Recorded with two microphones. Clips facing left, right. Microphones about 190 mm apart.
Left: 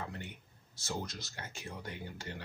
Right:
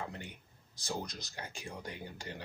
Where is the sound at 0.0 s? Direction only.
15° right (ahead or behind).